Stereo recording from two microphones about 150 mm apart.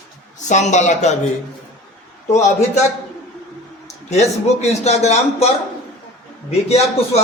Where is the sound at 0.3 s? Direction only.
55° left (ahead or behind).